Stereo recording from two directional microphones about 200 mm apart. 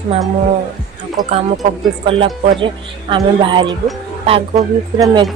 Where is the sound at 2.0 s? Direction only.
25° right (ahead or behind).